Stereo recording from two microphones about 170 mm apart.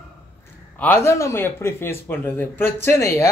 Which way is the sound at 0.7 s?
10° left (ahead or behind).